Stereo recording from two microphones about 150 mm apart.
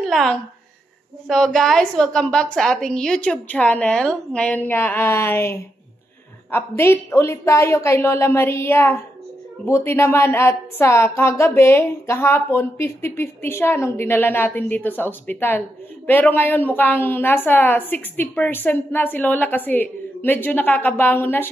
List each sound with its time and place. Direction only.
0.0 s a woman's voice: centre (ahead or behind)